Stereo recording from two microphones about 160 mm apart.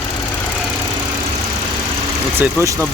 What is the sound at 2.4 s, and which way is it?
Speech, 15° right (ahead or behind).